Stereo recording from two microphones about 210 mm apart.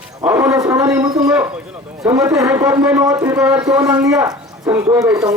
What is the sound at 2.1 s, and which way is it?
Speech, 15° right (ahead or behind).